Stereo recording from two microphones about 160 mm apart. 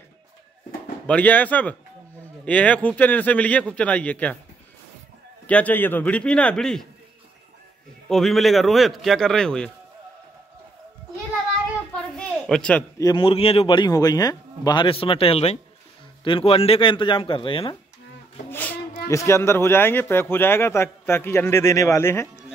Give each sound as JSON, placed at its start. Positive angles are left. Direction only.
{"t": 1.0, "sound": "speech", "side_deg": 10}
{"t": 5.5, "sound": "speech", "side_deg": 10}
{"t": 8.1, "sound": "speech", "side_deg": 0}
{"t": 11.9, "sound": "a sound", "side_deg": 5}
{"t": 12.9, "sound": "speech", "side_deg": 25}
{"t": 18.5, "sound": "child singing", "side_deg": 10}
{"t": 19.0, "sound": "speech", "side_deg": 20}